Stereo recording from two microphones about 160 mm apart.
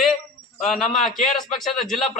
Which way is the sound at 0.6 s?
5° left (ahead or behind).